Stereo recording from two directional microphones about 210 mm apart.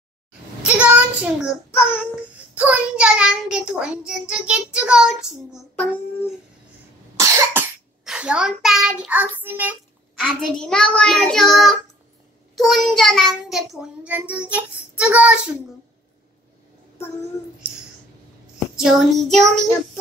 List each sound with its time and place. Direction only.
0.6 s child singing: 5° right (ahead or behind)
1.7 s child singing: 10° left (ahead or behind)
2.5 s child singing: 5° right (ahead or behind)
5.5 s child singing: 10° left (ahead or behind)
7.2 s cough: 15° right (ahead or behind)
10.2 s child singing: 5° left (ahead or behind)
13.5 s a child's voice: centre (ahead or behind)
15.0 s child singing: 5° right (ahead or behind)
18.8 s child singing: centre (ahead or behind)